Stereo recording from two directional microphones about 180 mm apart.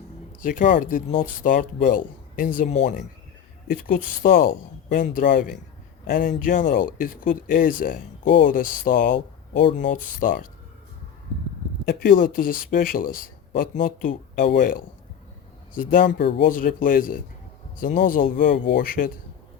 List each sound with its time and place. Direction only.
0.4 s speech: 50° left (ahead or behind)
11.9 s speech: 55° left (ahead or behind)
16.0 s speech: 65° left (ahead or behind)